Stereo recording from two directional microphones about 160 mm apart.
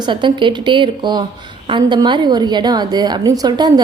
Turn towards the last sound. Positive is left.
turn(degrees=-25)  # may be behind; listen again after turning